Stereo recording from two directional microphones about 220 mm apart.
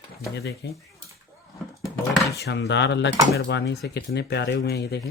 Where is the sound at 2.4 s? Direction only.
50° left (ahead or behind).